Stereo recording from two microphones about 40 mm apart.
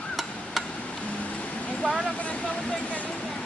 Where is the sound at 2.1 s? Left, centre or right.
Left.